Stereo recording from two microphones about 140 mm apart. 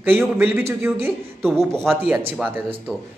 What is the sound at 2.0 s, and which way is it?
Speech, 10° right (ahead or behind).